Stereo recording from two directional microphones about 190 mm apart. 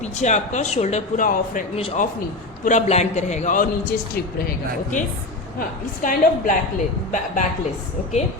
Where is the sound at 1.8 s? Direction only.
30° left (ahead or behind).